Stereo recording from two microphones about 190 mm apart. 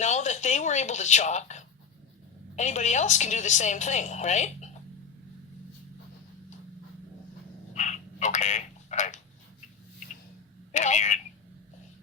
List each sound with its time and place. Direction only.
0.0 s a woman's voice: 40° left (ahead or behind)
7.7 s telephone: 40° left (ahead or behind)
10.7 s speech: 40° left (ahead or behind)